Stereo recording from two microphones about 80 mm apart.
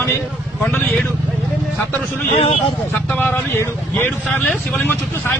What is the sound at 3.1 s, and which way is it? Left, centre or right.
Speech, left.